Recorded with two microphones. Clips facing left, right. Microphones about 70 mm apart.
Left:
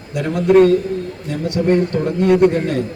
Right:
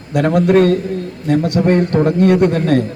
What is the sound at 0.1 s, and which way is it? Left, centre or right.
A man's voice, right.